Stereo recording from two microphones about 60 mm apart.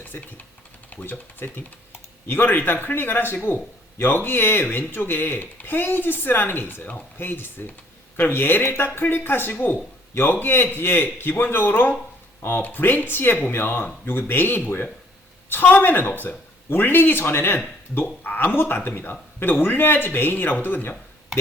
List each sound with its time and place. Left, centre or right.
0.0 s a man's voice: left